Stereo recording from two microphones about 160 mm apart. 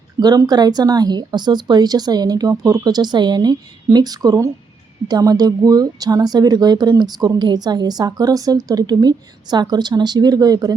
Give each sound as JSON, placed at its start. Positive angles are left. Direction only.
{"t": 0.2, "sound": "speech", "side_deg": -25}